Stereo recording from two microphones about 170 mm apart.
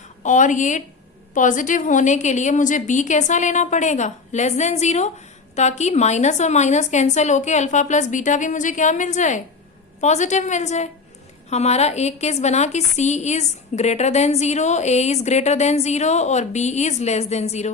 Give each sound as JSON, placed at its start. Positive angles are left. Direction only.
{"t": 0.2, "sound": "a woman's voice", "side_deg": 45}